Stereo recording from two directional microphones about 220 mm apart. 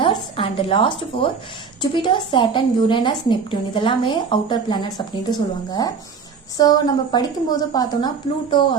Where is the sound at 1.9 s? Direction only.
20° left (ahead or behind).